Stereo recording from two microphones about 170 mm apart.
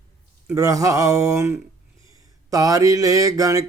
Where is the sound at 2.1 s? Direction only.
20° right (ahead or behind).